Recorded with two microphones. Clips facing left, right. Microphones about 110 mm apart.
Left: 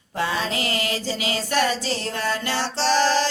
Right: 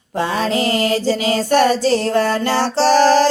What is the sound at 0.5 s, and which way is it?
Music, 30° right (ahead or behind).